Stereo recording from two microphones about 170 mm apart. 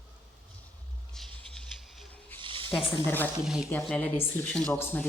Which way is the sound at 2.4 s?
30° right (ahead or behind).